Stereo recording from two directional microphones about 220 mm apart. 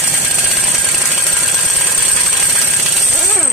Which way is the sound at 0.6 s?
Centre (ahead or behind).